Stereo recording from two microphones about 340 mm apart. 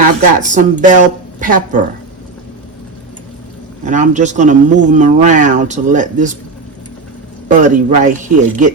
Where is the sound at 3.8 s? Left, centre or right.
Right.